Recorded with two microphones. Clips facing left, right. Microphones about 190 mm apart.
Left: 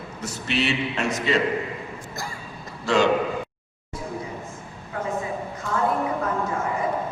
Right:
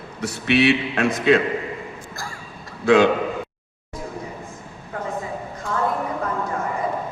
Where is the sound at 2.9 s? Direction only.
55° right (ahead or behind).